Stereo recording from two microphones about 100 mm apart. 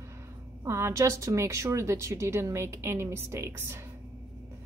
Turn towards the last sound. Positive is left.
turn(degrees=-25)  # may be behind; listen again after turning